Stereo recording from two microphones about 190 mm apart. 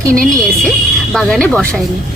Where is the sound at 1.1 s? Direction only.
Centre (ahead or behind).